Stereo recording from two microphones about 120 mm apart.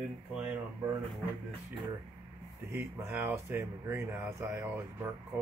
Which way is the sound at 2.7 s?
20° right (ahead or behind).